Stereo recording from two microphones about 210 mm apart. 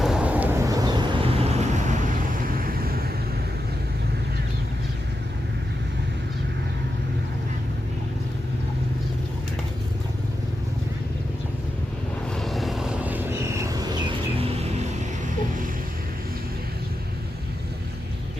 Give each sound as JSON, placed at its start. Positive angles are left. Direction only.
{"t": 0.0, "sound": "vehicle", "side_deg": -5}
{"t": 2.6, "sound": "vehicle", "side_deg": -45}
{"t": 12.3, "sound": "vehicle", "side_deg": 0}